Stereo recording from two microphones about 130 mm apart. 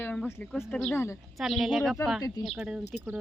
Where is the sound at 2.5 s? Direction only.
5° right (ahead or behind).